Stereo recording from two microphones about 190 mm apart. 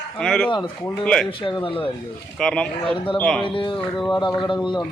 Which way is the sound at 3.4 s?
25° left (ahead or behind).